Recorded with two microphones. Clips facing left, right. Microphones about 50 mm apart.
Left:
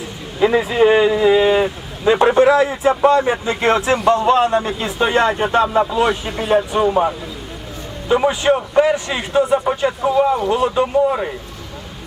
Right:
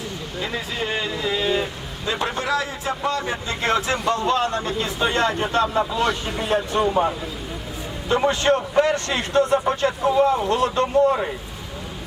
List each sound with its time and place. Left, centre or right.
0.3 s a man's voice: centre